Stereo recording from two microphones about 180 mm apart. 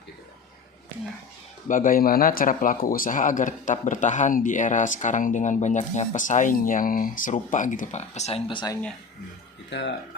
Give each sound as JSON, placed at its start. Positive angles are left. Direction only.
{"t": 1.6, "sound": "speech", "side_deg": 50}
{"t": 9.6, "sound": "speech", "side_deg": 75}